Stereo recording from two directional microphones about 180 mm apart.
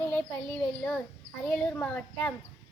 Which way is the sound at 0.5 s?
10° left (ahead or behind).